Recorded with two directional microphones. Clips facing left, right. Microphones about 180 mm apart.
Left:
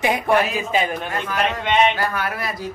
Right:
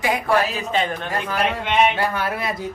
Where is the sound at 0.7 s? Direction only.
10° left (ahead or behind).